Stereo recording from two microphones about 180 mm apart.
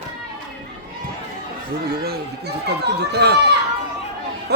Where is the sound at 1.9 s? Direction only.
60° right (ahead or behind).